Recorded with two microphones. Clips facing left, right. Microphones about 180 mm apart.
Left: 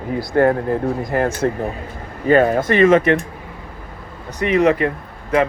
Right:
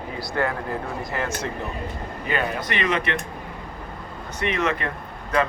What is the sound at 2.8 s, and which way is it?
Speech, 45° left (ahead or behind).